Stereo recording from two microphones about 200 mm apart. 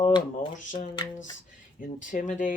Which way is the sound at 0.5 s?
40° left (ahead or behind).